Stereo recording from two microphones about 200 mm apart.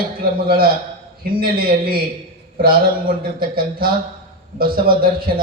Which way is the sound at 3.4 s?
45° right (ahead or behind).